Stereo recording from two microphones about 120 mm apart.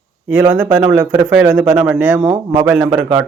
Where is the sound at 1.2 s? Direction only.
10° right (ahead or behind).